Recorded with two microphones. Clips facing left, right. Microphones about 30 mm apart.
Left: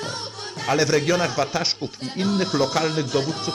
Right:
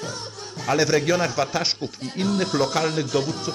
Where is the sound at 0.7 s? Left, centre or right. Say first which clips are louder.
Even; centre.